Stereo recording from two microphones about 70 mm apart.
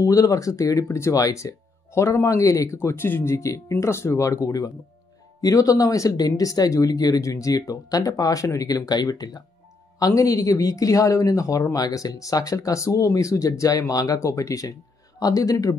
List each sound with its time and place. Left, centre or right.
0.0 s speech: left
9.9 s speech: left